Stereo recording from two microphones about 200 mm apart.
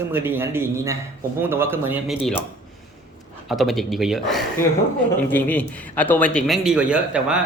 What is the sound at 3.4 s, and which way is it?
A man's voice, centre (ahead or behind).